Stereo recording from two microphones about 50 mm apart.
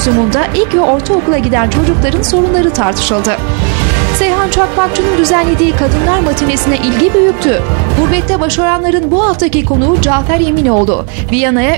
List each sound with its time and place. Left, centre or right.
0.1 s a woman's voice: right